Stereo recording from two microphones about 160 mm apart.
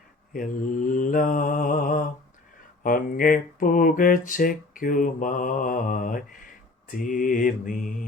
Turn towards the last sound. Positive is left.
turn(degrees=55)  # may be behind; listen again after turning